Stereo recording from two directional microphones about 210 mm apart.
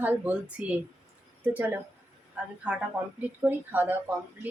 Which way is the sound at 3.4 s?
10° right (ahead or behind).